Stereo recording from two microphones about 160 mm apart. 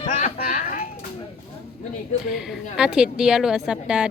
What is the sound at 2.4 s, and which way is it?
Speech, 5° right (ahead or behind).